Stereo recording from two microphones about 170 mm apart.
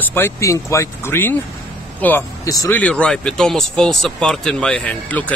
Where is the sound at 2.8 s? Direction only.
5° left (ahead or behind).